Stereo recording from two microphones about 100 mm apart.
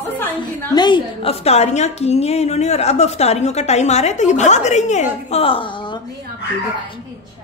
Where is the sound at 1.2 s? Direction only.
85° left.